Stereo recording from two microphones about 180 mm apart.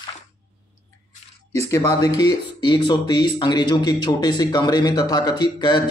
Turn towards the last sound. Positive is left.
turn(degrees=25)  # may be behind; listen again after turning